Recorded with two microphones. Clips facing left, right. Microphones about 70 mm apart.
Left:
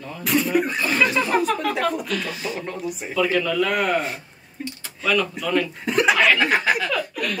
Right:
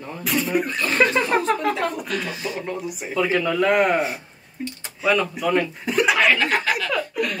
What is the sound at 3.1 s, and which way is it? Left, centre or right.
Speech, centre.